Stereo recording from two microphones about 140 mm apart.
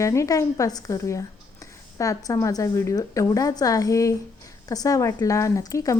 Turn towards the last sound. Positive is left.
turn(degrees=25)  # may be behind; listen again after turning